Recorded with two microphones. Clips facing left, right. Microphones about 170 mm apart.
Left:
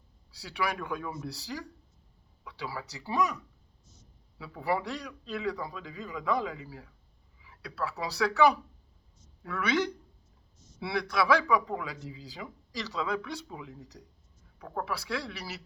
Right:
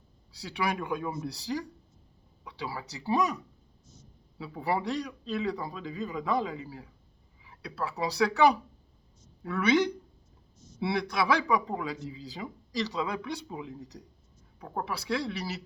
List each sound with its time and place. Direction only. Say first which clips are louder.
0.3 s speech: right 2 dB; 20° right (ahead or behind)